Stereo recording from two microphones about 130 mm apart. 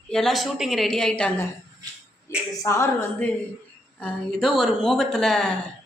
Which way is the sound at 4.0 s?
5° left (ahead or behind).